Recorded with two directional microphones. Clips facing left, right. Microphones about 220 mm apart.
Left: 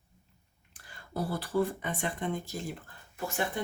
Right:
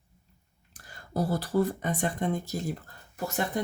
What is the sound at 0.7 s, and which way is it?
Speech, 40° right (ahead or behind).